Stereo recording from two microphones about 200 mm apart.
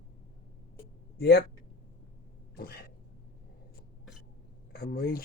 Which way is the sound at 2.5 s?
50° left (ahead or behind).